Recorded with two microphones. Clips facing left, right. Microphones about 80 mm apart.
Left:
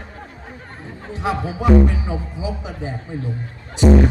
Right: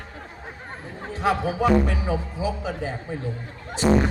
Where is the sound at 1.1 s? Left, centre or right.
Left.